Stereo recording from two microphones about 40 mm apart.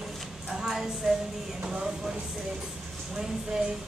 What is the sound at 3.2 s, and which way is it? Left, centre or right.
Speech, centre.